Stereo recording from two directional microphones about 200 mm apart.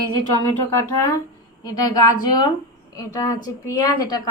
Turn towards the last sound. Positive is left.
turn(degrees=20)  # may be behind; listen again after turning